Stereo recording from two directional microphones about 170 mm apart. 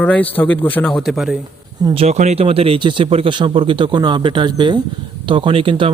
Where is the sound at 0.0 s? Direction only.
10° left (ahead or behind).